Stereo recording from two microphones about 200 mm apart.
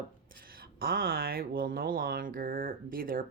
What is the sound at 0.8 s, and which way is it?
Speech, 45° right (ahead or behind).